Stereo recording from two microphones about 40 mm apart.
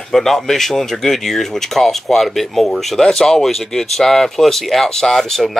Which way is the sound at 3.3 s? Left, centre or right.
Centre.